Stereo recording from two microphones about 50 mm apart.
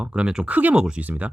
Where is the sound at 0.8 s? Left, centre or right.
Centre.